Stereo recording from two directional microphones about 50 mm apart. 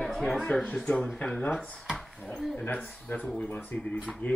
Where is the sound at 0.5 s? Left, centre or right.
Left.